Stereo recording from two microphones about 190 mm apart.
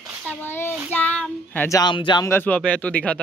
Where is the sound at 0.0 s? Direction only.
10° left (ahead or behind).